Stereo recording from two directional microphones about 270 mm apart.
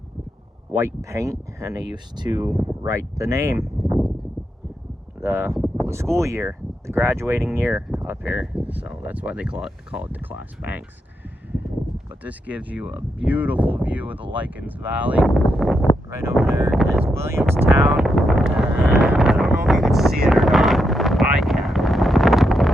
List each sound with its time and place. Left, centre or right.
0.7 s speech: centre
5.2 s speech: centre
12.2 s speech: centre
17.2 s a sound: centre
20.2 s wind noise: centre